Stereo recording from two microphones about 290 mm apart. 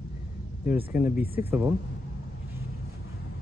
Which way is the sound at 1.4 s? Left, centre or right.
Centre.